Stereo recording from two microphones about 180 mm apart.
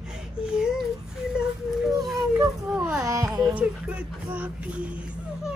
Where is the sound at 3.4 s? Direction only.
5° right (ahead or behind).